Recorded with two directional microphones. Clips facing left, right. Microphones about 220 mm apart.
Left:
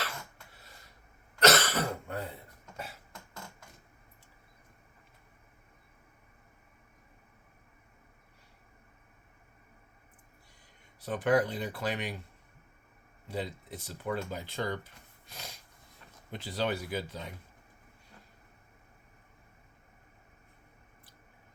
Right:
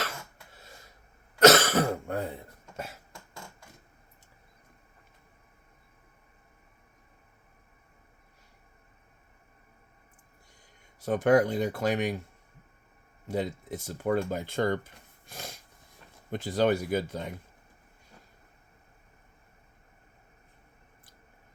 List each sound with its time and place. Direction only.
1.4 s cough: 50° right (ahead or behind)
11.0 s speech: 45° right (ahead or behind)
13.2 s speech: 45° right (ahead or behind)
15.3 s a sound: 50° right (ahead or behind)
16.3 s speech: 50° right (ahead or behind)